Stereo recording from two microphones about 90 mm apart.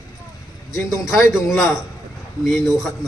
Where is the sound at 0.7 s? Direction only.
35° left (ahead or behind).